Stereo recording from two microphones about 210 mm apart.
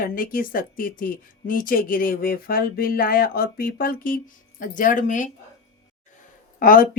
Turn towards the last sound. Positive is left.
turn(degrees=40)  # may be behind; listen again after turning